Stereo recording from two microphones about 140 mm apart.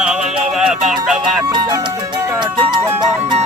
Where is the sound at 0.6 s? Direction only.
5° right (ahead or behind).